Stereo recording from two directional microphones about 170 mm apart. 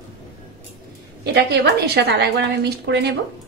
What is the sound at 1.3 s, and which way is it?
A woman's voice, 70° right (ahead or behind).